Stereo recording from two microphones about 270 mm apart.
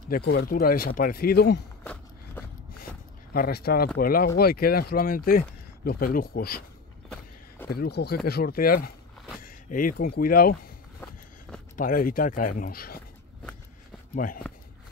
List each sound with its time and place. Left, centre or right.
0.1 s speech: left
3.3 s speech: left
7.7 s speech: left
11.7 s speech: left
14.1 s speech: left